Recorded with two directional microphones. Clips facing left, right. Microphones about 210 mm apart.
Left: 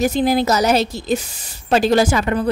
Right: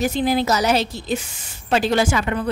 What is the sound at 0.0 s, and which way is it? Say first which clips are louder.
A woman's voice: left 3 dB; 40° left (ahead or behind).